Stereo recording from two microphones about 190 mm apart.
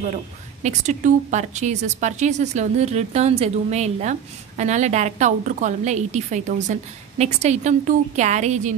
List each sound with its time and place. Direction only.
0.1 s a woman's voice: 40° right (ahead or behind)